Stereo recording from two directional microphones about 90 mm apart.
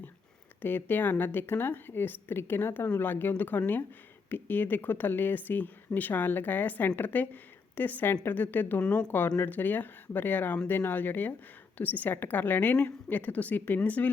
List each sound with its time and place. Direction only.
0.6 s a woman's voice: 20° left (ahead or behind)